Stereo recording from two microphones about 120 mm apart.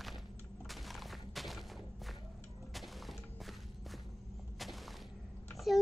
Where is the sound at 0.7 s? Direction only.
Centre (ahead or behind).